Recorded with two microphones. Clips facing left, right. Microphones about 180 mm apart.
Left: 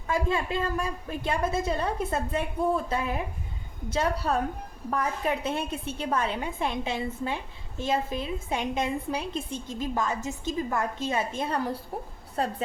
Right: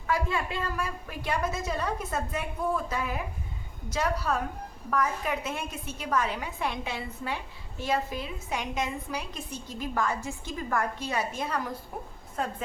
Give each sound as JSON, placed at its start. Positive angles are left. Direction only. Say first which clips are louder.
{"t": 0.1, "sound": "a woman's voice", "louder": "left 2 dB", "side_deg": 25}